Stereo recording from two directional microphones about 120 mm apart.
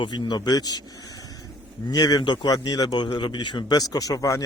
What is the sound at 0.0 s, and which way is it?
Speech, 35° left (ahead or behind).